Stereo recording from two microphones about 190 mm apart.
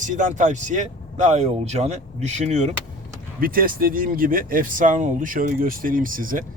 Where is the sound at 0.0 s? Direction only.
40° right (ahead or behind).